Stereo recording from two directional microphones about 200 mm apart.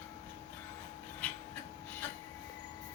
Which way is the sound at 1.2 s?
5° left (ahead or behind).